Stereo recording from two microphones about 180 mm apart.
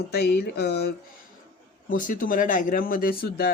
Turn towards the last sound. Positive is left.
turn(degrees=60)  # may be behind; listen again after turning